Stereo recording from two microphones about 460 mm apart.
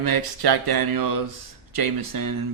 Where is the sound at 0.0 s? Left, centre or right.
Right.